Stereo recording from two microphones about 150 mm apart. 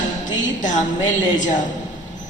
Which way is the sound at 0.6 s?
55° left (ahead or behind).